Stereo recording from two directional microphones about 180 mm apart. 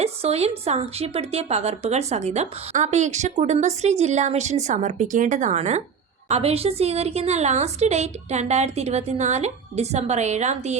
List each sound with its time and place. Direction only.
0.0 s a woman's voice: 35° right (ahead or behind)